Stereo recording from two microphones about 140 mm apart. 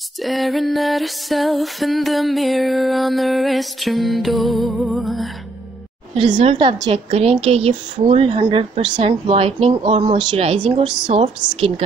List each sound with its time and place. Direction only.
0.2 s music: centre (ahead or behind)
4.6 s music: 10° right (ahead or behind)
4.9 s music: centre (ahead or behind)
6.4 s a woman's voice: 40° right (ahead or behind)